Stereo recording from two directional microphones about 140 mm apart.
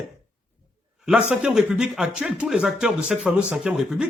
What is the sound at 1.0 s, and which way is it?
Speech, 5° right (ahead or behind).